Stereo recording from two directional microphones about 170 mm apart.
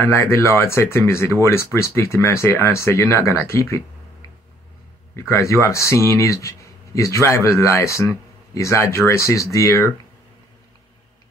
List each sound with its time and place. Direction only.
0.0 s speech: 15° left (ahead or behind)
5.1 s speech: 15° left (ahead or behind)